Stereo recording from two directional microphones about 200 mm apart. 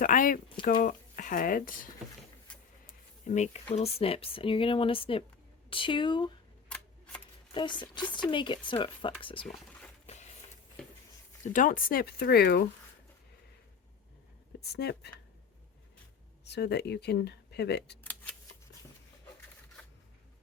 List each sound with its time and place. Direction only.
0.0 s speech: 40° left (ahead or behind)
3.2 s speech: 35° left (ahead or behind)
7.5 s speech: 25° left (ahead or behind)
11.5 s speech: 45° left (ahead or behind)
14.6 s speech: 55° left (ahead or behind)
16.4 s speech: 55° left (ahead or behind)
18.0 s camera: 10° left (ahead or behind)
19.8 s a sound: 5° left (ahead or behind)